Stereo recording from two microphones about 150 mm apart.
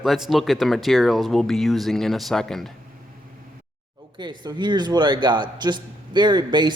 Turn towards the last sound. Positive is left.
turn(degrees=-30)  # may be behind; listen again after turning